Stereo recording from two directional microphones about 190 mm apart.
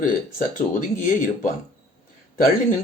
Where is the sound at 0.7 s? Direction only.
45° left (ahead or behind).